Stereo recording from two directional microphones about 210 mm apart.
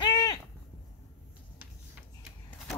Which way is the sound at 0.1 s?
20° left (ahead or behind).